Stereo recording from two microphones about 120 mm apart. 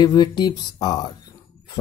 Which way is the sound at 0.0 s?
35° left (ahead or behind).